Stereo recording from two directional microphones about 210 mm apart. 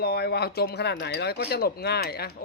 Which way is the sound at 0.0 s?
50° left (ahead or behind).